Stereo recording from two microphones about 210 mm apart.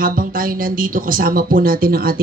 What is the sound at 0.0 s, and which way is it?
Speech, 40° right (ahead or behind).